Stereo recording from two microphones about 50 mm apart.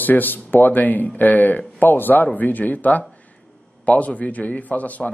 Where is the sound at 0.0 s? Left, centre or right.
Left.